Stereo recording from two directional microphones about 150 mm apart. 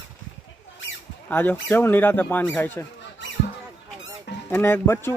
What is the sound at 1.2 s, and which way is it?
Speech, 10° left (ahead or behind).